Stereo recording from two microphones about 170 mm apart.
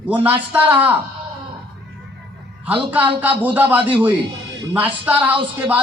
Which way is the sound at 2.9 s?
10° right (ahead or behind).